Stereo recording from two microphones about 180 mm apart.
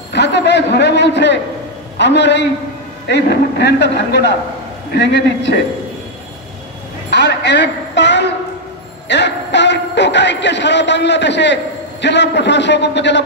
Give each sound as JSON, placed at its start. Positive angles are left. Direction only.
{"t": 0.1, "sound": "a man's voice", "side_deg": 70}
{"t": 7.1, "sound": "a sound", "side_deg": 70}
{"t": 9.1, "sound": "music", "side_deg": 75}